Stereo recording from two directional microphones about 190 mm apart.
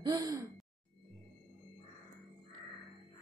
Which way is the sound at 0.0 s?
20° right (ahead or behind).